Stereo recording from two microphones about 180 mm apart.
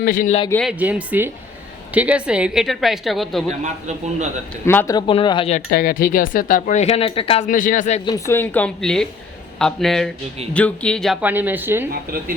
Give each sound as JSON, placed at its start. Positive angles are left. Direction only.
{"t": 0.0, "sound": "speech", "side_deg": 50}
{"t": 0.7, "sound": "speech", "side_deg": -10}
{"t": 3.6, "sound": "a man's voice", "side_deg": -40}
{"t": 4.6, "sound": "a woman's voice", "side_deg": 15}
{"t": 4.9, "sound": "speech", "side_deg": 25}
{"t": 5.7, "sound": "speech", "side_deg": 55}
{"t": 7.4, "sound": "speech", "side_deg": 45}
{"t": 8.0, "sound": "a woman's voice", "side_deg": 15}
{"t": 11.2, "sound": "speech", "side_deg": -10}